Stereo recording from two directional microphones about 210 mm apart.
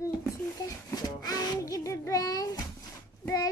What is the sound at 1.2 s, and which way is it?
Child singing, 15° left (ahead or behind).